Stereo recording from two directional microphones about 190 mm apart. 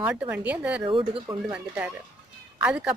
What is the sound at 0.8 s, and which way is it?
Speech, 25° right (ahead or behind).